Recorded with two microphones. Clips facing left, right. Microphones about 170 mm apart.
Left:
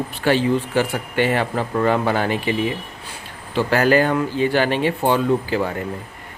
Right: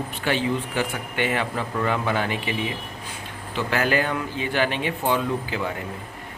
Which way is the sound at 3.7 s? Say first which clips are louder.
Left 7 dB; 40° left (ahead or behind).